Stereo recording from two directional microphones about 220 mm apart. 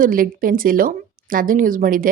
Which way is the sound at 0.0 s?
40° right (ahead or behind).